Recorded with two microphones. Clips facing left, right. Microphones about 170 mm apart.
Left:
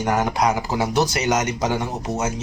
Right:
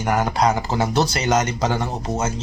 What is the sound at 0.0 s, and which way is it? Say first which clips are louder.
Speech: right 1 dB; 15° left (ahead or behind).